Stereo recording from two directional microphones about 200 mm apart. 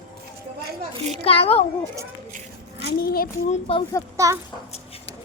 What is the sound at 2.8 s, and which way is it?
Speech, 50° left (ahead or behind).